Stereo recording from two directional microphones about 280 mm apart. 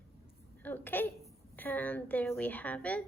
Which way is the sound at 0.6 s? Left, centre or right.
Centre.